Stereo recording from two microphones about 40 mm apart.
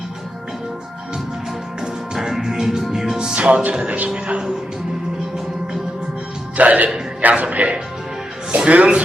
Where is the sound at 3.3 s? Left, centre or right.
Right.